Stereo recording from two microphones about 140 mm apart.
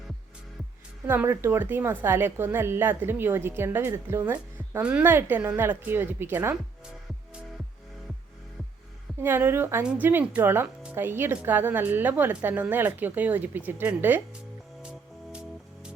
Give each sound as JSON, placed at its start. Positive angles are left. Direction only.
{"t": 1.0, "sound": "speech", "side_deg": -15}
{"t": 9.2, "sound": "speech", "side_deg": -15}
{"t": 14.8, "sound": "music", "side_deg": -5}